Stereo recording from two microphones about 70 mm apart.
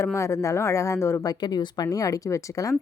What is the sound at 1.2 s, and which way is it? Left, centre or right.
Speech, left.